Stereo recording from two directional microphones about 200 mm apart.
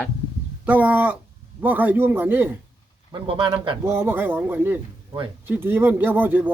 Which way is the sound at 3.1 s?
25° right (ahead or behind).